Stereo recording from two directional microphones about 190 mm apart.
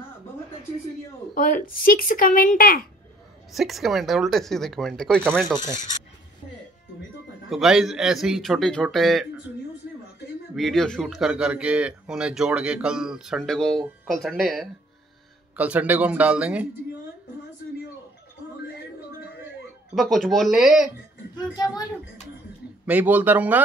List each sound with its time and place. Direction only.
1.3 s speech: 45° left (ahead or behind)
3.5 s speech: centre (ahead or behind)
7.4 s speech: centre (ahead or behind)
10.5 s speech: centre (ahead or behind)
20.0 s speech: centre (ahead or behind)
21.4 s speech: 20° left (ahead or behind)
22.8 s speech: 10° right (ahead or behind)